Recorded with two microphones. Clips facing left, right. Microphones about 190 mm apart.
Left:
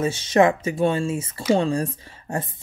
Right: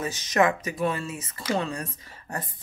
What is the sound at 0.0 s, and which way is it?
Speech, 30° left (ahead or behind).